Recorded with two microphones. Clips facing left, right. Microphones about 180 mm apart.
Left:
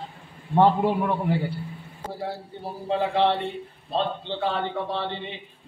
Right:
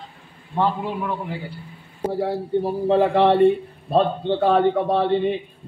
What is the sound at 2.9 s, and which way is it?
A man's voice, 60° right (ahead or behind).